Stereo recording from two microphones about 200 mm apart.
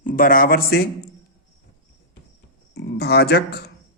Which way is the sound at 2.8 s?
55° left (ahead or behind).